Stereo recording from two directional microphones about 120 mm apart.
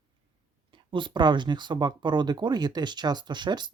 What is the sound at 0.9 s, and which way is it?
Speech, 40° right (ahead or behind).